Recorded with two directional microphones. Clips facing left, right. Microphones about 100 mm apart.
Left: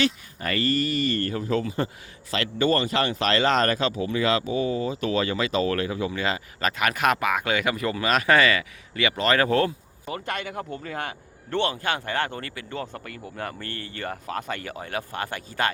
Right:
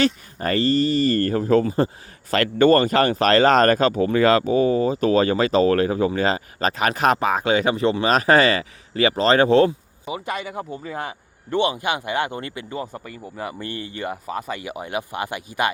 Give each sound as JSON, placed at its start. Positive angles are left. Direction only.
{"t": 0.0, "sound": "speech", "side_deg": -35}
{"t": 2.3, "sound": "speech", "side_deg": -50}
{"t": 10.1, "sound": "speech", "side_deg": -10}
{"t": 12.7, "sound": "speech", "side_deg": -10}